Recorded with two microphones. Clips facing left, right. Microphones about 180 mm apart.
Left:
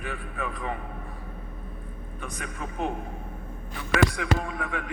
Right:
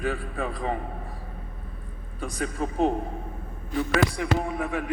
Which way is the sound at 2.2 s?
35° right (ahead or behind).